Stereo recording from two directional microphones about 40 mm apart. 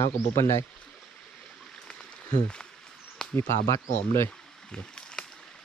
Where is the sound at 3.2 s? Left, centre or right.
Centre.